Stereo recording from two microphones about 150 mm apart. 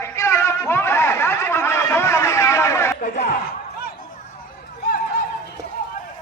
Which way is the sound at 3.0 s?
50° left (ahead or behind).